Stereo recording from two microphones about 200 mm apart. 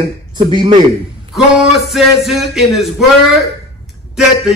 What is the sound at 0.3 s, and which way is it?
A man's voice, 20° right (ahead or behind).